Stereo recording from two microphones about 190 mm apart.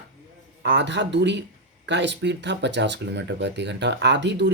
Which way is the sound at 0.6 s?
70° right (ahead or behind).